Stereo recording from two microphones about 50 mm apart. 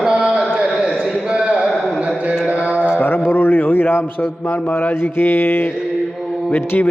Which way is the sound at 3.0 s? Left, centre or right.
Left.